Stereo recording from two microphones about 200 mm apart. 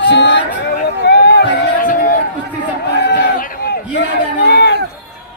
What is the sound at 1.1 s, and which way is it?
Run, 55° left (ahead or behind).